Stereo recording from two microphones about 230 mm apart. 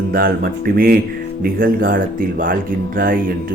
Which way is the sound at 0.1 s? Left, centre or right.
Right.